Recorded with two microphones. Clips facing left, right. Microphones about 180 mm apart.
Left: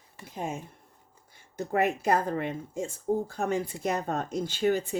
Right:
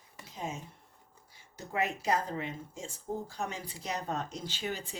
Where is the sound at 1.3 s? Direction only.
55° left (ahead or behind).